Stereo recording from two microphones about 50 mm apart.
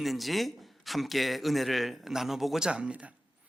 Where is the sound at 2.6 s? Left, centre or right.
Centre.